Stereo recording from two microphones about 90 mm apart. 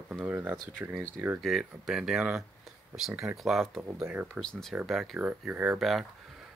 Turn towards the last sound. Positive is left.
turn(degrees=0)  # may be behind; listen again after turning